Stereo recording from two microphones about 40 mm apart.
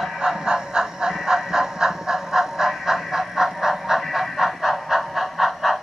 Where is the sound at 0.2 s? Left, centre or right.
Centre.